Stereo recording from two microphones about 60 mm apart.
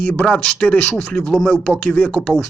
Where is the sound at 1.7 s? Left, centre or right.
Left.